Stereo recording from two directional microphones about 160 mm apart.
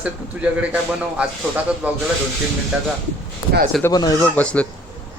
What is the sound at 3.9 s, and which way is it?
Speech, 25° left (ahead or behind).